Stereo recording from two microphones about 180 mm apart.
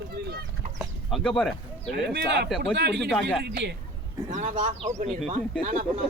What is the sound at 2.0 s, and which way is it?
Speech, 70° right (ahead or behind).